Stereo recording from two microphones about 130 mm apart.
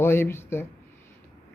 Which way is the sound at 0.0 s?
20° left (ahead or behind).